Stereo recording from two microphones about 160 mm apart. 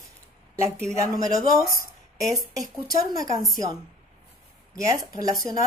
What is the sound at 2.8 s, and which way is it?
Speech, 20° right (ahead or behind).